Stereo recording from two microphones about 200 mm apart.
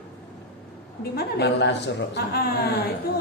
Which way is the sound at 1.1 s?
55° left (ahead or behind).